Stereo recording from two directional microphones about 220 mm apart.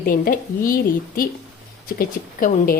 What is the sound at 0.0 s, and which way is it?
A woman's voice, 40° left (ahead or behind).